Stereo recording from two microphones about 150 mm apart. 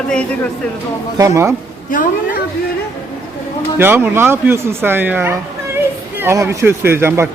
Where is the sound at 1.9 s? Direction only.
65° left (ahead or behind).